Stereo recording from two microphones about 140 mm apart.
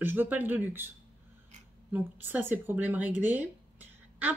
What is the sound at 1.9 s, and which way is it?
Speech, 15° right (ahead or behind).